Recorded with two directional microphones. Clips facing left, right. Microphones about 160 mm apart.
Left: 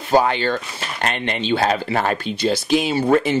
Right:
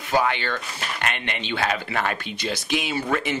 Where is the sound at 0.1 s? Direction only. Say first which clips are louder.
Left 6 dB; 35° left (ahead or behind).